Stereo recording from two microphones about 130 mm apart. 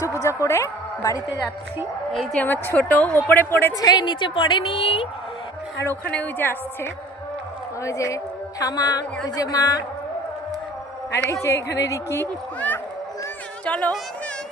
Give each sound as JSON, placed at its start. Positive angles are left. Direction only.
{"t": 0.0, "sound": "music", "side_deg": 25}
{"t": 0.4, "sound": "a woman's voice", "side_deg": 20}
{"t": 2.1, "sound": "a woman's voice", "side_deg": 10}
{"t": 3.8, "sound": "a woman's voice", "side_deg": 30}
{"t": 6.1, "sound": "a woman's voice", "side_deg": 10}
{"t": 11.4, "sound": "a woman's voice", "side_deg": 25}